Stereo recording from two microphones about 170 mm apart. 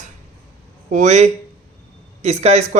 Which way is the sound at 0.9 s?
45° right (ahead or behind).